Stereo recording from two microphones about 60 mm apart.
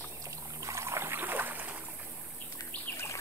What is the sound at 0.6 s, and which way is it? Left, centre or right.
Boat, right.